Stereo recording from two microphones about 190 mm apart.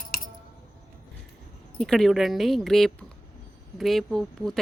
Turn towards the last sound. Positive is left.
turn(degrees=0)  # may be behind; listen again after turning